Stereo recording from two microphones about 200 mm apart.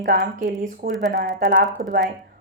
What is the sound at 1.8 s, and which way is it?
Speech, 40° right (ahead or behind).